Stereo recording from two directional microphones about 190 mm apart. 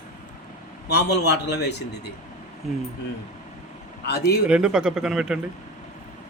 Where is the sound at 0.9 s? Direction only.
60° left (ahead or behind).